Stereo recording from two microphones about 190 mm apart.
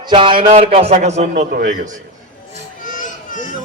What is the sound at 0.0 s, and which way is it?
A man's voice, 25° right (ahead or behind).